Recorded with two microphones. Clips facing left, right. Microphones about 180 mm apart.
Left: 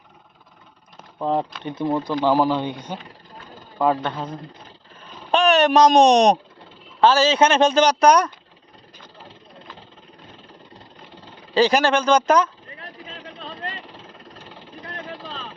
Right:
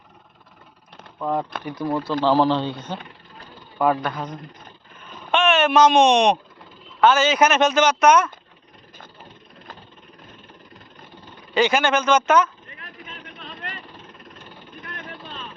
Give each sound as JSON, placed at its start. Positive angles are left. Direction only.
{"t": 1.2, "sound": "a man's voice", "side_deg": 25}
{"t": 4.0, "sound": "speech", "side_deg": 30}
{"t": 5.0, "sound": "a sound", "side_deg": 35}
{"t": 7.0, "sound": "speech", "side_deg": 30}
{"t": 10.3, "sound": "vehicle", "side_deg": 30}